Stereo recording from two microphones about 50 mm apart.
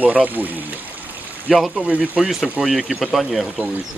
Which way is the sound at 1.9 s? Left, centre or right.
Right.